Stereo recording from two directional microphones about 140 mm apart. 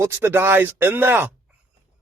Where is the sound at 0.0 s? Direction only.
15° right (ahead or behind).